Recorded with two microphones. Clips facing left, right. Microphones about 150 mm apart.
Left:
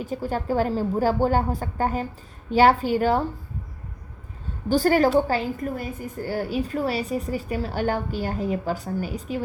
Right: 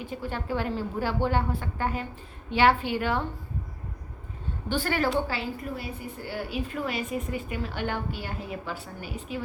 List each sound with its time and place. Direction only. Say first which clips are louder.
0.0 s a woman's voice: left 6 dB; 40° left (ahead or behind)
4.7 s a woman's voice: left 8 dB; 40° left (ahead or behind)